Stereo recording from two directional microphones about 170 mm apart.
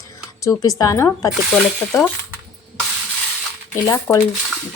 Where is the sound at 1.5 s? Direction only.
5° left (ahead or behind).